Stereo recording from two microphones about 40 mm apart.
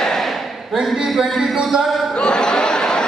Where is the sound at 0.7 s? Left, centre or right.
Centre.